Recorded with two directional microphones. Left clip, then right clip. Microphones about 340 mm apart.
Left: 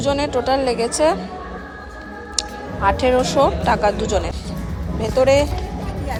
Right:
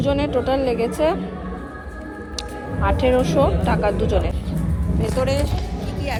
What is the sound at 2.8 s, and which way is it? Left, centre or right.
A woman's voice, centre.